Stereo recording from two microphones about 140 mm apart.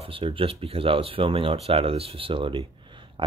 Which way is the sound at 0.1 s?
40° right (ahead or behind).